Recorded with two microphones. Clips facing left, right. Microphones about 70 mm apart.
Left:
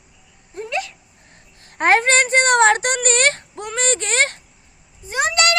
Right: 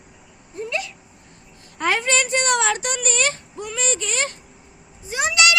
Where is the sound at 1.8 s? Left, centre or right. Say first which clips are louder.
Left 6 dB; left.